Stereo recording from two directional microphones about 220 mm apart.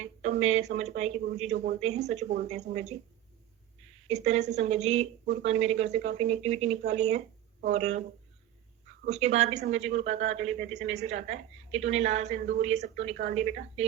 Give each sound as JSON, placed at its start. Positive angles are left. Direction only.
{"t": 0.0, "sound": "speech", "side_deg": -30}
{"t": 4.1, "sound": "speech", "side_deg": -30}
{"t": 9.0, "sound": "speech", "side_deg": -30}